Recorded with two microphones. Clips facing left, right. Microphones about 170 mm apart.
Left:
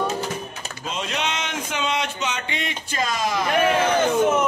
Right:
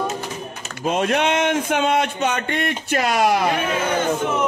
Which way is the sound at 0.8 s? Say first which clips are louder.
Right 9 dB; 55° right (ahead or behind).